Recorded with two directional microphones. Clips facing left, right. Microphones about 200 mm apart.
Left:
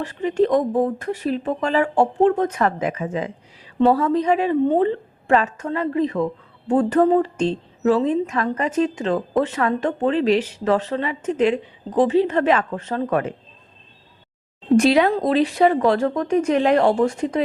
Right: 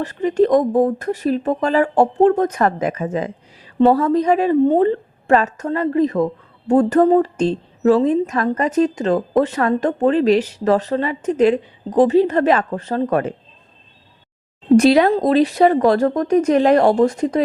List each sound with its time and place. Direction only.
0.0 s a woman's voice: 40° right (ahead or behind)
14.8 s a woman's voice: 40° right (ahead or behind)